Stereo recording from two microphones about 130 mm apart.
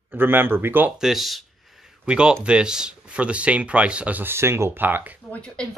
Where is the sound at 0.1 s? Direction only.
15° right (ahead or behind).